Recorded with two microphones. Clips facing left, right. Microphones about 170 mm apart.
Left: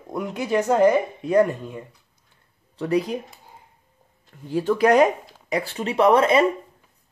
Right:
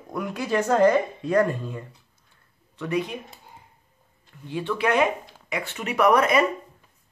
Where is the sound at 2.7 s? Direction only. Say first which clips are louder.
Left 4 dB; 35° left (ahead or behind).